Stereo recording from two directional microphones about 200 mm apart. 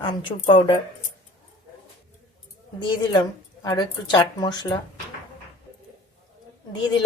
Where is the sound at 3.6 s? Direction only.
20° left (ahead or behind).